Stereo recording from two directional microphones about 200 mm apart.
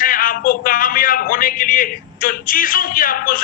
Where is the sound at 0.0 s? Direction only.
45° left (ahead or behind).